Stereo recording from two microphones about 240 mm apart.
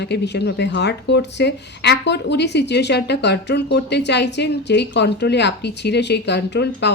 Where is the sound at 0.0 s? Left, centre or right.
Left.